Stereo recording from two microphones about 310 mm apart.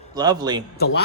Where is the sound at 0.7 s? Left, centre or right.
Left.